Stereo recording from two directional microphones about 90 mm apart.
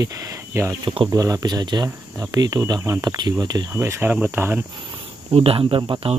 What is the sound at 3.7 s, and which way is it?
Speech, 25° right (ahead or behind).